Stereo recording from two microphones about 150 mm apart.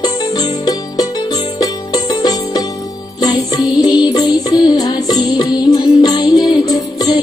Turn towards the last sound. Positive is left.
turn(degrees=25)  # may be behind; listen again after turning